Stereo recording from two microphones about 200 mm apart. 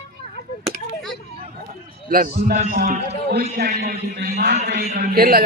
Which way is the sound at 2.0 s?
45° right (ahead or behind).